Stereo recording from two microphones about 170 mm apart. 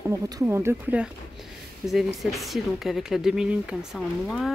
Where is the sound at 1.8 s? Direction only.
Centre (ahead or behind).